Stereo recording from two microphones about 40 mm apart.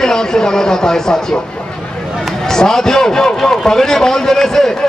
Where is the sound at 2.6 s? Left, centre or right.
Centre.